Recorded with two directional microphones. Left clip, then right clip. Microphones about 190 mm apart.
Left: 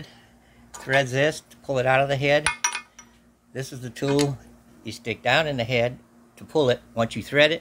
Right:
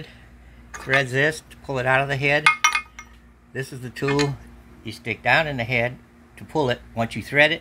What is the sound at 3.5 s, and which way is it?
Speech, 10° left (ahead or behind).